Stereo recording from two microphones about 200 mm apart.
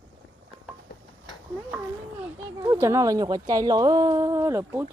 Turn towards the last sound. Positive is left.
turn(degrees=-15)  # may be behind; listen again after turning